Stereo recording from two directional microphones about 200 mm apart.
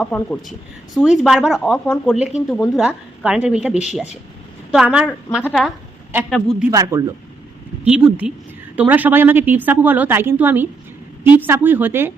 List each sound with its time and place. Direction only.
0.0 s speech: 5° left (ahead or behind)
6.7 s a woman's voice: 15° right (ahead or behind)
7.9 s a woman's voice: 5° right (ahead or behind)